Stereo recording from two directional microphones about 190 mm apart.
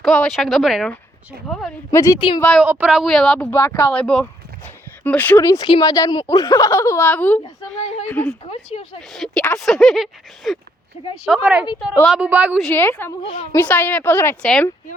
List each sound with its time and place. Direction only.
0.0 s speech: centre (ahead or behind)
1.9 s speech: 15° left (ahead or behind)
2.1 s speech: 25° left (ahead or behind)
2.4 s a woman's voice: centre (ahead or behind)
12.6 s speech: 10° left (ahead or behind)